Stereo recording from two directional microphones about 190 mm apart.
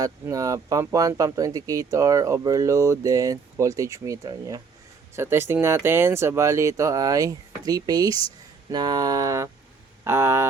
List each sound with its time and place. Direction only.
0.0 s speech: 15° right (ahead or behind)